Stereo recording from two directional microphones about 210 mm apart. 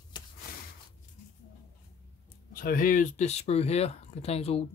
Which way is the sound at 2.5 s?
40° left (ahead or behind).